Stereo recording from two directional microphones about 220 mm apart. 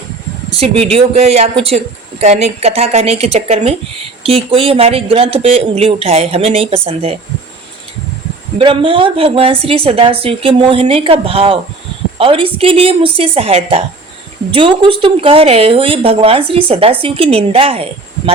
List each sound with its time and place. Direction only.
0.5 s speech: 25° right (ahead or behind)
8.5 s speech: 25° right (ahead or behind)